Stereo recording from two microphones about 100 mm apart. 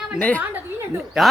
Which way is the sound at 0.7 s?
30° right (ahead or behind).